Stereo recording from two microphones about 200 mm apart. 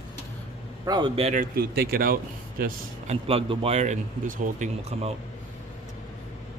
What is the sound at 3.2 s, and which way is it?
Speech, 30° right (ahead or behind).